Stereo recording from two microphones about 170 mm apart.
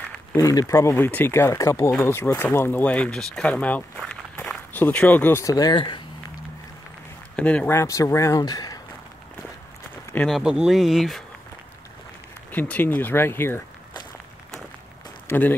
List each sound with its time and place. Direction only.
0.3 s speech: 20° left (ahead or behind)
7.3 s speech: 10° left (ahead or behind)
10.1 s speech: centre (ahead or behind)
12.4 s speech: 10° left (ahead or behind)
15.2 s speech: 10° left (ahead or behind)